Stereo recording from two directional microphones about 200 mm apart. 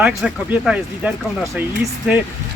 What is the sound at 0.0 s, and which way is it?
Speech, 5° right (ahead or behind).